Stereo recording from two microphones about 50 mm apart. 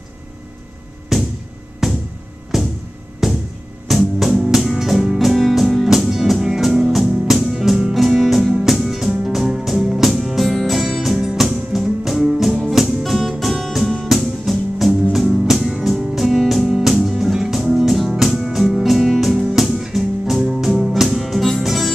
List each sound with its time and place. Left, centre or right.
1.1 s music: centre